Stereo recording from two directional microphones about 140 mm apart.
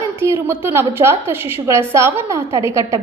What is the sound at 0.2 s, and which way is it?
A woman's voice, 20° right (ahead or behind).